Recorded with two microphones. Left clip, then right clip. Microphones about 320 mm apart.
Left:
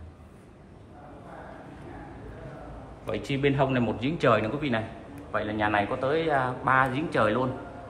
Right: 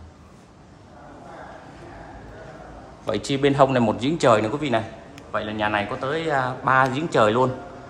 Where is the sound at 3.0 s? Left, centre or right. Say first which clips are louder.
Right 6 dB; centre.